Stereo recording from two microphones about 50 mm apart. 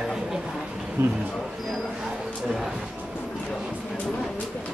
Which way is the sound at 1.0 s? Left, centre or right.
Right.